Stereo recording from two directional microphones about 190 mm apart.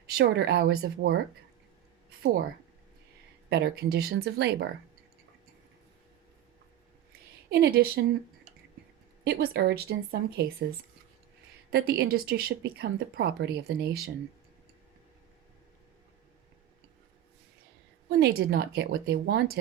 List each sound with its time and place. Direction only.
0.2 s speech: 55° right (ahead or behind)
3.5 s speech: 55° right (ahead or behind)
7.5 s speech: 55° right (ahead or behind)
9.2 s speech: 60° right (ahead or behind)
18.2 s speech: 55° right (ahead or behind)